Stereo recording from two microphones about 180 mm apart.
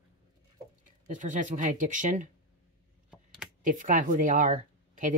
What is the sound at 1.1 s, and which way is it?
Speech, 45° right (ahead or behind).